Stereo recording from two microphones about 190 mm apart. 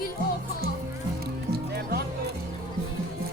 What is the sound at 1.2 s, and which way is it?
Music, 55° right (ahead or behind).